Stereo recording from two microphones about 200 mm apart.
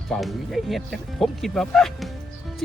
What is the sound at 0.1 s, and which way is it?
Speech, centre (ahead or behind).